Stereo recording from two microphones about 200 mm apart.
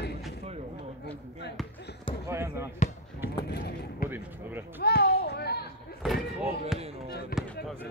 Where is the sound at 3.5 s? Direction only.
55° left (ahead or behind).